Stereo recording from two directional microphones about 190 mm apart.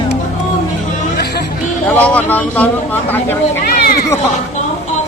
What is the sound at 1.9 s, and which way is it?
Vehicle, 10° left (ahead or behind).